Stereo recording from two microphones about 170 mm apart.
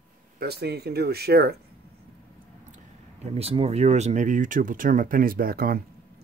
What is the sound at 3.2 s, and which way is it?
Speech, 35° right (ahead or behind).